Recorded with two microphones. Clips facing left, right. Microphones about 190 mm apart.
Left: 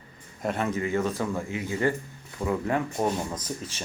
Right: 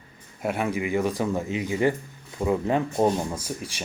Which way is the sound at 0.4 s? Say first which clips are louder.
Right 1 dB; 10° right (ahead or behind).